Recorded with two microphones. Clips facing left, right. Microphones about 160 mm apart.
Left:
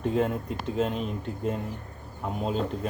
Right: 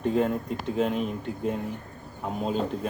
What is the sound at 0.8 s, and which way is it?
Speech, 5° right (ahead or behind).